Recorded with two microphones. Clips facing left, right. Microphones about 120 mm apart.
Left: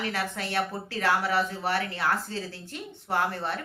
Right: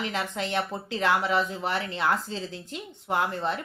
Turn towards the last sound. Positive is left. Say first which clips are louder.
# right 1 dB
turn(degrees=-20)  # may be behind; listen again after turning